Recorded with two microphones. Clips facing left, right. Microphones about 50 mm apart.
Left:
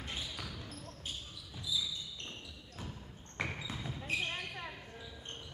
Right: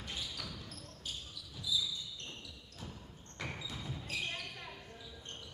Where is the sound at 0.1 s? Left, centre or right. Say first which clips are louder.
Even; left.